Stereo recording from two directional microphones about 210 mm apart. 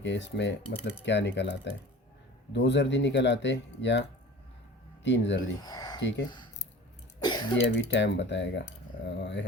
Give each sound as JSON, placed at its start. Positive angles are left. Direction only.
{"t": 0.0, "sound": "speech", "side_deg": 55}
{"t": 5.0, "sound": "speech", "side_deg": 55}
{"t": 5.5, "sound": "speech", "side_deg": 20}
{"t": 6.0, "sound": "speech", "side_deg": 60}
{"t": 7.2, "sound": "cough", "side_deg": 20}
{"t": 7.5, "sound": "speech", "side_deg": 60}